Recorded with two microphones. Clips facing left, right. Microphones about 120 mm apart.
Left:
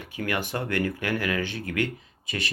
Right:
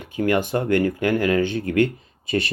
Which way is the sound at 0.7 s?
20° right (ahead or behind).